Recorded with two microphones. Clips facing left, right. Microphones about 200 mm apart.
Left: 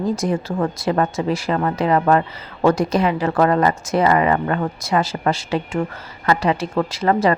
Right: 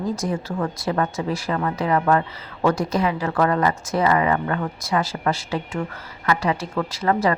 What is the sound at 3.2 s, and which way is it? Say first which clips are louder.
Speech: left 4 dB; 30° left (ahead or behind).